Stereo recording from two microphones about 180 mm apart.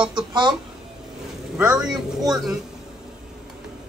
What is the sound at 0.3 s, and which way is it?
Speech, 25° right (ahead or behind).